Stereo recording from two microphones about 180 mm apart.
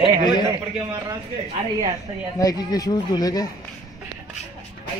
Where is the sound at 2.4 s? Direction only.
20° left (ahead or behind).